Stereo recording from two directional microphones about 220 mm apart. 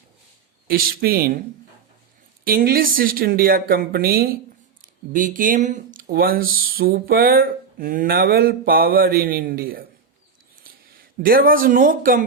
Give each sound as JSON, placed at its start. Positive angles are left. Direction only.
{"t": 0.7, "sound": "speech", "side_deg": -40}
{"t": 2.4, "sound": "speech", "side_deg": -40}